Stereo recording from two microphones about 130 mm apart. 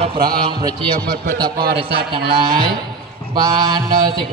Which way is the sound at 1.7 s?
40° right (ahead or behind).